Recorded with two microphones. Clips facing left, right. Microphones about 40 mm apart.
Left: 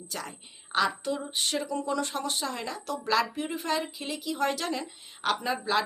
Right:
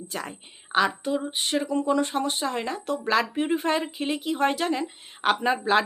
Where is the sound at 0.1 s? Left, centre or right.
Right.